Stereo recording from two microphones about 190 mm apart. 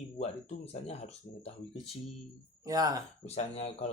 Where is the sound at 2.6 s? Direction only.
20° right (ahead or behind).